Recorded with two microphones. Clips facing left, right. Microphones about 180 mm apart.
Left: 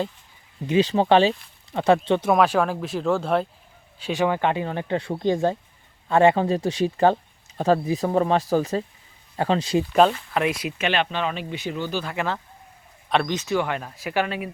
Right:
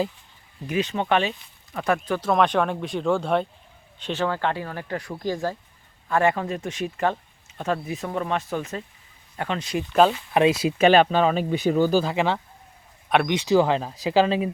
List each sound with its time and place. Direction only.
0.7 s speech: 30° left (ahead or behind)
2.3 s speech: 5° left (ahead or behind)
4.0 s speech: 15° left (ahead or behind); by 9.8 s 30° left (ahead or behind)
9.9 s speech: centre (ahead or behind)
10.3 s speech: 25° right (ahead or behind); by 12.0 s 40° right (ahead or behind)
12.0 s speech: 20° right (ahead or behind)